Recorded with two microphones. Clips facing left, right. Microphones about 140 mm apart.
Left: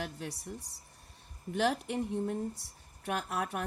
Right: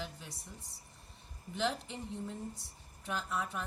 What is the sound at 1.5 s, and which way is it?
A woman's voice, 70° left (ahead or behind).